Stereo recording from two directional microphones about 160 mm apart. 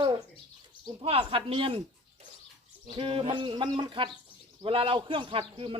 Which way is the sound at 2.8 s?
30° right (ahead or behind).